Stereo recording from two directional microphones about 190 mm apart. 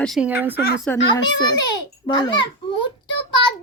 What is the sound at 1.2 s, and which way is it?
Speech, 20° left (ahead or behind).